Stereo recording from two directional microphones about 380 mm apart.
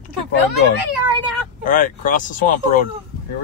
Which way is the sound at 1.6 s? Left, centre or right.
Left.